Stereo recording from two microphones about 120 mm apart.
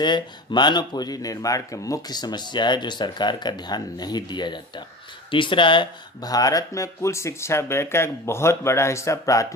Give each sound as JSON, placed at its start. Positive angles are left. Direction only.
{"t": 0.0, "sound": "speech", "side_deg": 40}